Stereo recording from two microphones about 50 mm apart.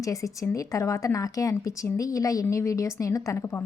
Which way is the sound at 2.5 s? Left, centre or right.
Left.